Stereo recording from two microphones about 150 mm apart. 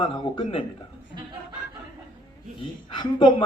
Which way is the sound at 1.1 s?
70° left (ahead or behind).